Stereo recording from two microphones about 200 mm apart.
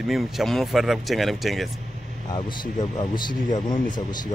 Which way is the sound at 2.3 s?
20° left (ahead or behind).